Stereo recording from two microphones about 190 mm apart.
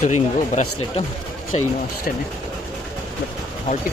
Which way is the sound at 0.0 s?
40° left (ahead or behind).